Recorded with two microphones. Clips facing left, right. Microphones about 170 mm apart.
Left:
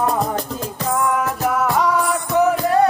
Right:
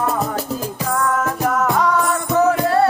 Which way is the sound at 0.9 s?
15° left (ahead or behind).